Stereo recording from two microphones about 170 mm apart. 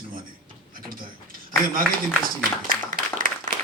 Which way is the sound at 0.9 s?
55° right (ahead or behind).